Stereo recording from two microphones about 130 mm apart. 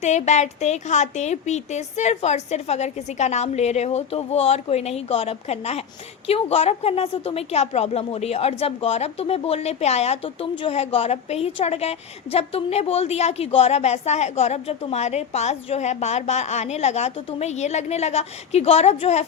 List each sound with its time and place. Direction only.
0.0 s a woman's voice: 60° left (ahead or behind)